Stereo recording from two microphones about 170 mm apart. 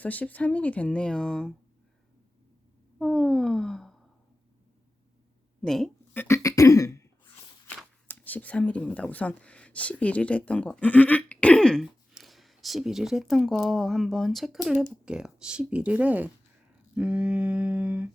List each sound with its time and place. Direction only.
0.0 s speech: 10° left (ahead or behind)
3.0 s a sound: centre (ahead or behind)
5.6 s speech: centre (ahead or behind)
6.1 s throat clearing: 15° left (ahead or behind)
8.0 s speech: 10° left (ahead or behind); by 16.3 s 10° right (ahead or behind)
16.9 s a sound: 5° right (ahead or behind)